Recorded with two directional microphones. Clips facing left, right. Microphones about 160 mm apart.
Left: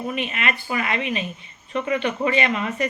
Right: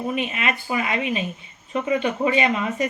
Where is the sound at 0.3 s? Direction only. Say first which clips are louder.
Right 1 dB; 20° right (ahead or behind).